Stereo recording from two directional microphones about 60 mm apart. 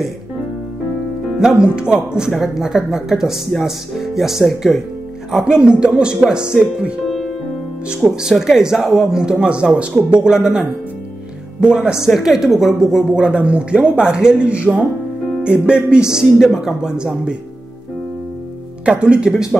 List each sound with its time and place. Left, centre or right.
1.4 s speech: centre
8.2 s speech: centre
11.6 s speech: centre
18.9 s speech: centre